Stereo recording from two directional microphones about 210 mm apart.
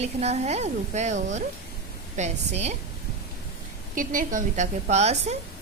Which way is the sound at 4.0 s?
40° right (ahead or behind).